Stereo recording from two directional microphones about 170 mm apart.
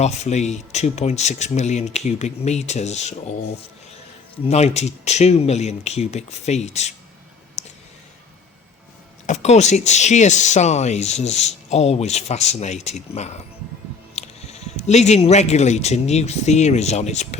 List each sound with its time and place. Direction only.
0.0 s speech: 40° left (ahead or behind)
4.4 s speech: 40° left (ahead or behind)
9.2 s speech: 40° left (ahead or behind)